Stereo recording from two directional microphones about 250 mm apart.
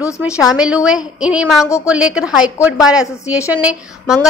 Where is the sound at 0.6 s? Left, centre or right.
Centre.